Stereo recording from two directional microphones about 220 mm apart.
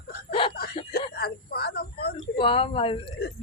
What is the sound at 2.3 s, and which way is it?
Speech, 25° left (ahead or behind).